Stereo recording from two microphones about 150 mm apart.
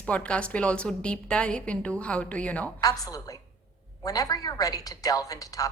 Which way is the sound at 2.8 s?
25° left (ahead or behind).